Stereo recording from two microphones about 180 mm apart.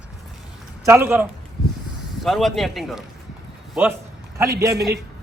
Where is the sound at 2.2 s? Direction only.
Centre (ahead or behind).